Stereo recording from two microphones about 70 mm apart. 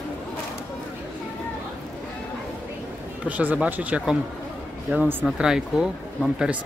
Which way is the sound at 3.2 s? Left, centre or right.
Right.